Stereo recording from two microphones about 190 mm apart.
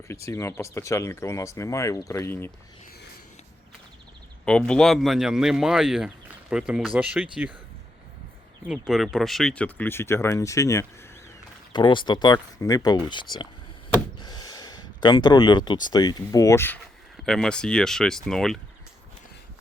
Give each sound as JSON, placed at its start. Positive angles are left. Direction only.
{"t": 0.1, "sound": "speech", "side_deg": 15}
{"t": 4.4, "sound": "speech", "side_deg": 5}
{"t": 8.9, "sound": "speech", "side_deg": 0}